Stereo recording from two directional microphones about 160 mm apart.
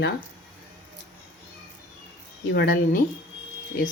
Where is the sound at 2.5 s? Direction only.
65° left (ahead or behind).